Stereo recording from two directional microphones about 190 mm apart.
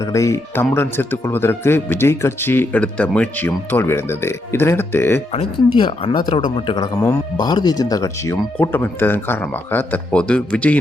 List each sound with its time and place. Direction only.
0.0 s speech: 15° left (ahead or behind)
5.3 s speech: 30° left (ahead or behind); by 10.8 s 5° left (ahead or behind)